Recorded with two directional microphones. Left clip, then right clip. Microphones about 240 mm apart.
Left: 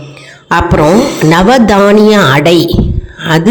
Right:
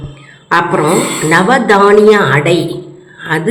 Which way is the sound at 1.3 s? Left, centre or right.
Left.